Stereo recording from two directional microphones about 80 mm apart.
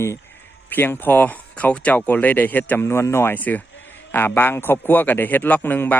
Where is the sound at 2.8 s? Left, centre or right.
Left.